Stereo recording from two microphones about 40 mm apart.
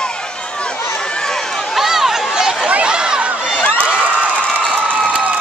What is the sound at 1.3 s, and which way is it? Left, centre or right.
Run, centre.